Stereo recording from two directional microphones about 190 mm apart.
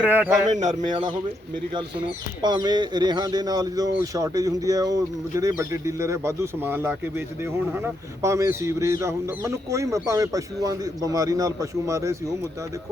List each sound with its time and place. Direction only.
0.0 s speech: 10° right (ahead or behind)
0.5 s speech: 40° right (ahead or behind)
2.0 s speech: 25° right (ahead or behind)
8.2 s speech: 15° right (ahead or behind)